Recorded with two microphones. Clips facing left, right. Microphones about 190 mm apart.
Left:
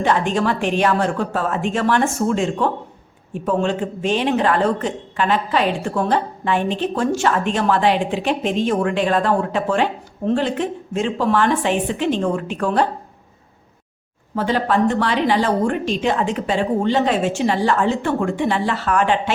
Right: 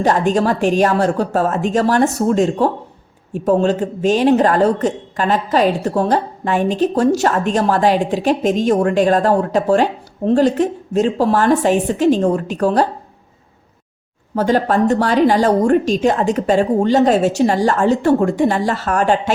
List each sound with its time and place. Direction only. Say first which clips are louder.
0.0 s speech: right 4 dB; 40° right (ahead or behind)
14.3 s speech: right 4 dB; 40° right (ahead or behind)